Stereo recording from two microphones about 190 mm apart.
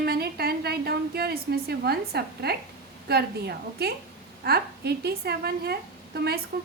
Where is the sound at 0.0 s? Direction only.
55° right (ahead or behind).